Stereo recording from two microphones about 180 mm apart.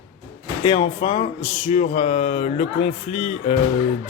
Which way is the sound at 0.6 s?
30° left (ahead or behind).